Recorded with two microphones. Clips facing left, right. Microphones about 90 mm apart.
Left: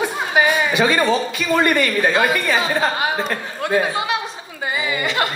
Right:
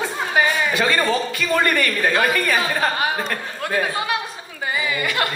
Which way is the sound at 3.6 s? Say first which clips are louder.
Left 3 dB; 20° left (ahead or behind).